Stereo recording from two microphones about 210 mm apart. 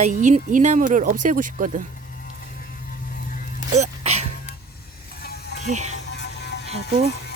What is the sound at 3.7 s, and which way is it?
Music, 30° right (ahead or behind).